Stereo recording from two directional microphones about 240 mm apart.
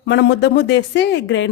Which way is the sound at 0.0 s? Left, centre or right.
Left.